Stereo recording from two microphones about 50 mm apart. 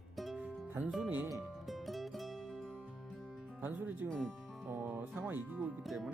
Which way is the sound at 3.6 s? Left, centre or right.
Right.